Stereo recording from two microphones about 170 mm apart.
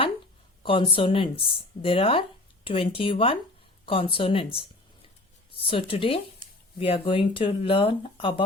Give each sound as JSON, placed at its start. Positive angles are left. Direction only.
{"t": 0.6, "sound": "speech", "side_deg": 30}